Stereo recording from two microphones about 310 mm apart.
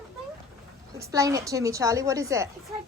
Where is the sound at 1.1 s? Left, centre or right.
Centre.